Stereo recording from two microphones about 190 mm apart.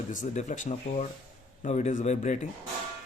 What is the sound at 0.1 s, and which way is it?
Speech, 40° left (ahead or behind).